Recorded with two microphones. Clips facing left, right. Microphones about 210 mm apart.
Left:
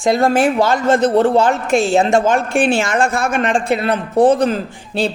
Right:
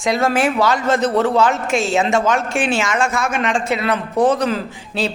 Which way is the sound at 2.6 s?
55° left (ahead or behind).